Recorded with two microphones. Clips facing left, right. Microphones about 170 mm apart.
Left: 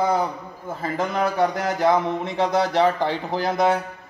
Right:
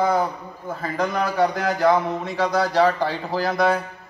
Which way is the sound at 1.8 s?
25° left (ahead or behind).